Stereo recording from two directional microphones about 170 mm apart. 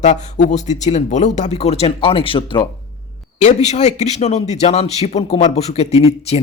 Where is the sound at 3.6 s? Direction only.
40° left (ahead or behind).